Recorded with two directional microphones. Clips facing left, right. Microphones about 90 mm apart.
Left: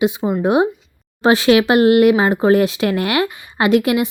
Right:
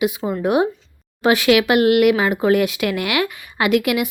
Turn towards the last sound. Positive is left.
turn(degrees=30)  # may be behind; listen again after turning